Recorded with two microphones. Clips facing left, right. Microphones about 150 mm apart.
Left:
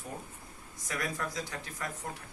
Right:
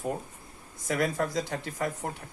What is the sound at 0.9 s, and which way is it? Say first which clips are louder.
Speech: right 8 dB; 60° right (ahead or behind).